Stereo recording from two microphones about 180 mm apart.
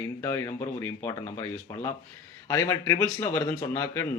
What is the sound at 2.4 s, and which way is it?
A man's voice, 15° left (ahead or behind).